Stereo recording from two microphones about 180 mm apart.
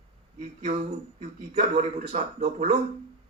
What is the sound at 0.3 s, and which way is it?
A man's voice, 45° right (ahead or behind).